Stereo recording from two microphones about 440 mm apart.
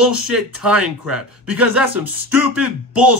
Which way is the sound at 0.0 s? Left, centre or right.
Right.